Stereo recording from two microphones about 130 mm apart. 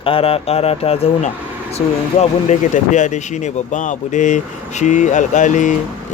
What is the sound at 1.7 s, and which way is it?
Speech, 60° left (ahead or behind).